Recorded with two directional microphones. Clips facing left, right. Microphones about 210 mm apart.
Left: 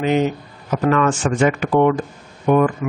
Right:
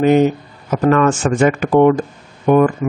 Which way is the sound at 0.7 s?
45° right (ahead or behind).